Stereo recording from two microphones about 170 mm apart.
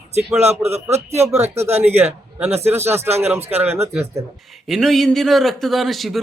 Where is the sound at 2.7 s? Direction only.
15° right (ahead or behind).